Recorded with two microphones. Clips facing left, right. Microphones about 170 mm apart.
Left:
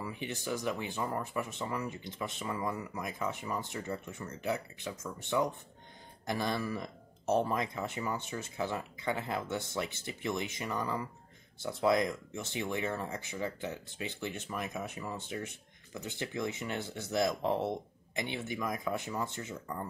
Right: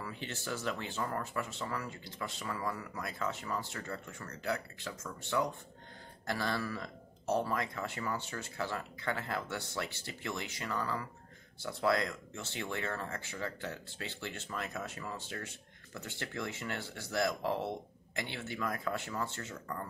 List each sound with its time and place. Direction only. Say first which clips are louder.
0.0 s speech: left 3 dB; 15° left (ahead or behind)